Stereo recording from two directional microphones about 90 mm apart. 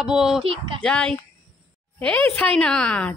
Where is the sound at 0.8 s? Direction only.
10° left (ahead or behind).